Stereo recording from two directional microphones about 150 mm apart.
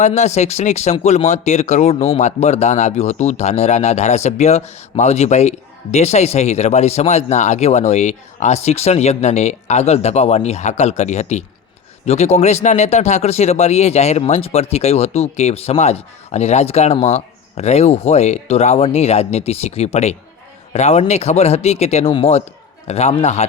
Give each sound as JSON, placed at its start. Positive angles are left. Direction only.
{"t": 0.0, "sound": "speech", "side_deg": 50}